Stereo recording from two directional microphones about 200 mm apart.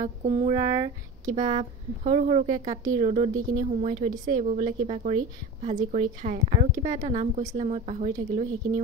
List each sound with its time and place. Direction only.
0.0 s speech: 35° right (ahead or behind)
1.2 s speech: 40° right (ahead or behind)